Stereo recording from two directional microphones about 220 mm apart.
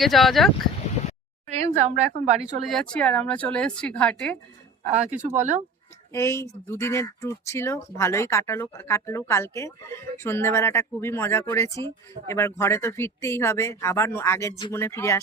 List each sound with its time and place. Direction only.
0.0 s speech: centre (ahead or behind)
1.5 s a woman's voice: 30° right (ahead or behind)
2.6 s speech: 5° left (ahead or behind)
5.2 s speech: 35° right (ahead or behind)
6.1 s speech: 15° left (ahead or behind)